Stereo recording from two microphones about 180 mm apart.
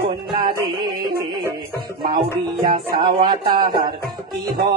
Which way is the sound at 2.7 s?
25° right (ahead or behind).